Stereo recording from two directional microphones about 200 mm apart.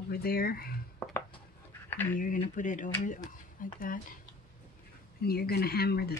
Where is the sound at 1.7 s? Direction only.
10° left (ahead or behind).